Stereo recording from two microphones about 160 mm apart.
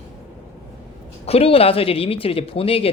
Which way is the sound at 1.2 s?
40° left (ahead or behind).